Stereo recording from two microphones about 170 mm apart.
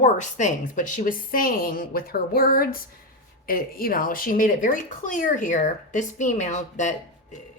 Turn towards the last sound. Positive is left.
turn(degrees=45)  # may be behind; listen again after turning